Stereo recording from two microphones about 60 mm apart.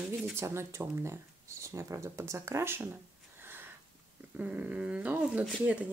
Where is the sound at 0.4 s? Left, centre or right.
Right.